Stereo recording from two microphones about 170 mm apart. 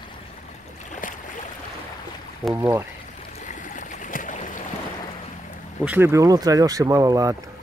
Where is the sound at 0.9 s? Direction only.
45° left (ahead or behind).